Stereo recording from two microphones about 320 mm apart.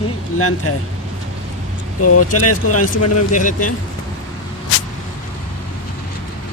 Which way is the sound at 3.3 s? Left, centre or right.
Left.